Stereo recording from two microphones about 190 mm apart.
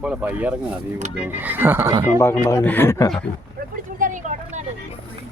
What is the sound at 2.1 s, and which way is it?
Speech, 15° left (ahead or behind).